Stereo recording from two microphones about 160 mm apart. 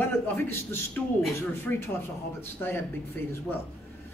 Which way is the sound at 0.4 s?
15° left (ahead or behind).